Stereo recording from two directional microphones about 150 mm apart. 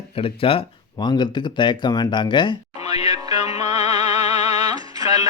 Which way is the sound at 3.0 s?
25° right (ahead or behind).